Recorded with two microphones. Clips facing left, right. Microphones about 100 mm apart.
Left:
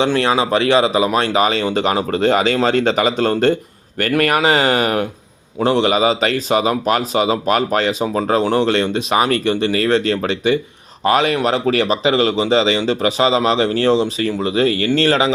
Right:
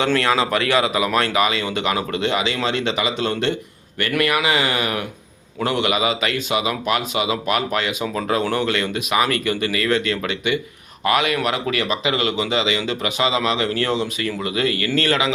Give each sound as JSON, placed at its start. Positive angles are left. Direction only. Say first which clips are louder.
{"t": 0.0, "sound": "a man's voice", "louder": "left 3 dB", "side_deg": 20}